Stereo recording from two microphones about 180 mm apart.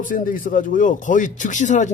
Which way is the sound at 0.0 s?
45° left (ahead or behind).